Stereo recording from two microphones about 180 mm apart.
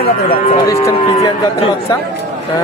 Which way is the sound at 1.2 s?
35° left (ahead or behind).